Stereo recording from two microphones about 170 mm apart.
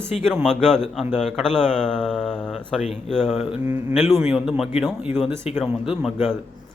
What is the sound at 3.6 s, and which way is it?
Speech, 20° right (ahead or behind).